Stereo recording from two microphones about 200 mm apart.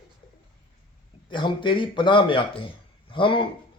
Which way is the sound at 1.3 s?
25° left (ahead or behind).